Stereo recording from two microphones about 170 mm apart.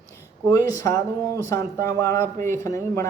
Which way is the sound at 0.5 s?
20° left (ahead or behind).